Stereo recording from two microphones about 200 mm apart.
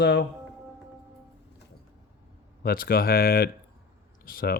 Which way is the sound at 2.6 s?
50° left (ahead or behind).